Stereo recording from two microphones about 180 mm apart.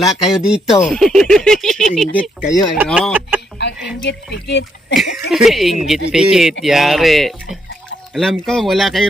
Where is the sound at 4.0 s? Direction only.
75° left (ahead or behind).